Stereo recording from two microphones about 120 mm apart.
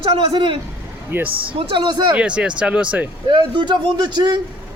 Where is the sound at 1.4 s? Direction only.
50° right (ahead or behind).